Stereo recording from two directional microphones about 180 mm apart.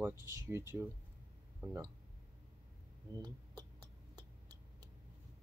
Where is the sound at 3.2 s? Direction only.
20° right (ahead or behind).